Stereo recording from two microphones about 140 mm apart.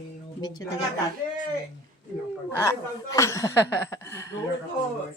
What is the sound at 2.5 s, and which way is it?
Speech, 20° left (ahead or behind).